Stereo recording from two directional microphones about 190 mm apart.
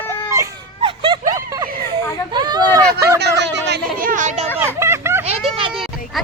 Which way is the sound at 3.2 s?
65° right (ahead or behind).